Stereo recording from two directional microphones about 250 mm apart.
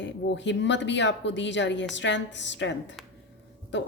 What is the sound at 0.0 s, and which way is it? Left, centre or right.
A woman's voice, left.